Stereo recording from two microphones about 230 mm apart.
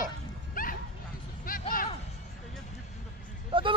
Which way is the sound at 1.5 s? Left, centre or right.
Left.